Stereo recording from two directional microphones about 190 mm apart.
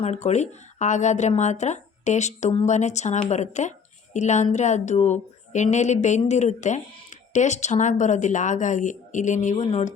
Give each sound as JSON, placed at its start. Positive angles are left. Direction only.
{"t": 0.0, "sound": "speech", "side_deg": 35}